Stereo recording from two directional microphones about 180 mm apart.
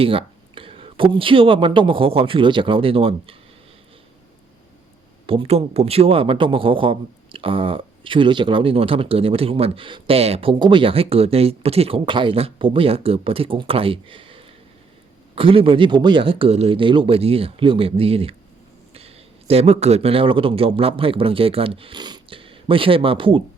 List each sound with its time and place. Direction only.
0.0 s speech: 30° right (ahead or behind)
5.2 s a man's voice: 30° right (ahead or behind)